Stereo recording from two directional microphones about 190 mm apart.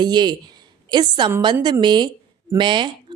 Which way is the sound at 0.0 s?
20° right (ahead or behind).